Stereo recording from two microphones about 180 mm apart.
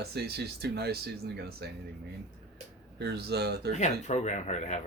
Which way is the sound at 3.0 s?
65° right (ahead or behind).